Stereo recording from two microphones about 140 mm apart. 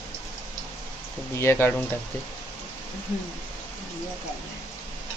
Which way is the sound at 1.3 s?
20° left (ahead or behind).